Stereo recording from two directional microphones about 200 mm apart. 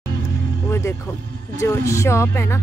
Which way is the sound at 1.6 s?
15° left (ahead or behind).